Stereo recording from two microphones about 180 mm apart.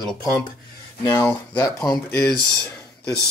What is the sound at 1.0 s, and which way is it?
Speech, 10° left (ahead or behind).